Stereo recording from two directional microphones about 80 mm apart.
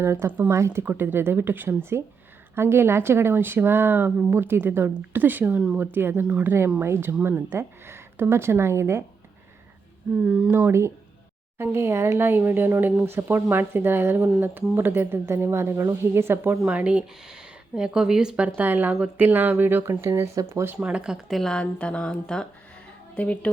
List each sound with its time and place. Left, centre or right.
0.0 s speech: right
0.3 s speech: right
0.5 s speech: right
10.2 s speech: centre
10.7 s speech: right
20.7 s speech: centre
21.2 s speech: centre